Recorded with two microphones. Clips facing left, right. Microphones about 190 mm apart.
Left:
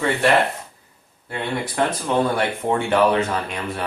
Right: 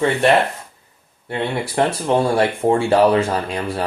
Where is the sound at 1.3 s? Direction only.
25° right (ahead or behind).